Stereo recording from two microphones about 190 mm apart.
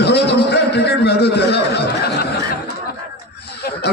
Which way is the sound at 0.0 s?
60° left (ahead or behind).